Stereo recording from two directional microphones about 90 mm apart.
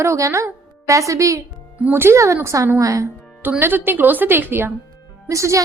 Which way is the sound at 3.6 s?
20° right (ahead or behind).